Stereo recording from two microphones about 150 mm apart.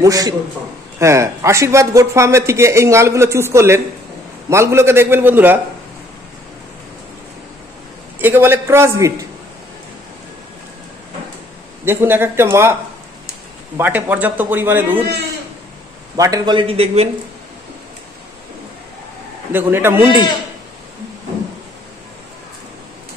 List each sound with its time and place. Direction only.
0.0 s a man's voice: 25° right (ahead or behind)
8.2 s a man's voice: 15° right (ahead or behind)
11.8 s a man's voice: 15° right (ahead or behind)
13.7 s a man's voice: 15° right (ahead or behind)
16.2 s a man's voice: 25° right (ahead or behind); by 17.1 s 40° right (ahead or behind)
19.5 s a man's voice: 15° right (ahead or behind)